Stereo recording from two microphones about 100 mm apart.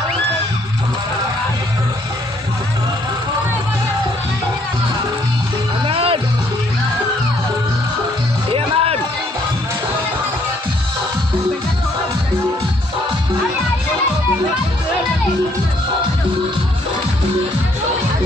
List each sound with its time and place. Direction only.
5.9 s music: 65° right (ahead or behind)
8.5 s music: 70° right (ahead or behind)